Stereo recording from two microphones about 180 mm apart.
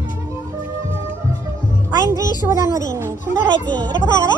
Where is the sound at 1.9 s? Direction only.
20° right (ahead or behind).